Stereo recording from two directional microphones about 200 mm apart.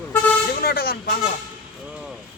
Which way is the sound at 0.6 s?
50° left (ahead or behind).